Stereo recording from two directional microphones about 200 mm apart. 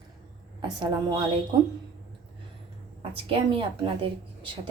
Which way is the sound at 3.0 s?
25° right (ahead or behind).